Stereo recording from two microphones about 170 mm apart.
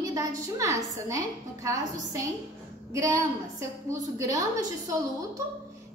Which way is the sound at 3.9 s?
20° right (ahead or behind).